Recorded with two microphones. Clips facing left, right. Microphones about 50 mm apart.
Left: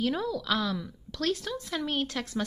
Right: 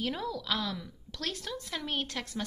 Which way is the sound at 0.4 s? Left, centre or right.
Centre.